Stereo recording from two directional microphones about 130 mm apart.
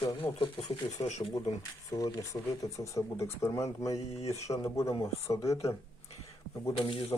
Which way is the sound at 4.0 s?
55° left (ahead or behind).